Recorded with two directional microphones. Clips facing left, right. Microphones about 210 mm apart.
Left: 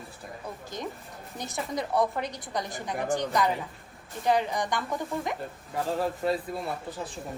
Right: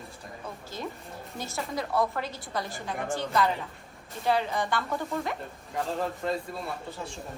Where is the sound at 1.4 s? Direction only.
20° left (ahead or behind).